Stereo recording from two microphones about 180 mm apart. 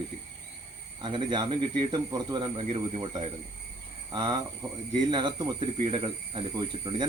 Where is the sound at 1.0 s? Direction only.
25° right (ahead or behind).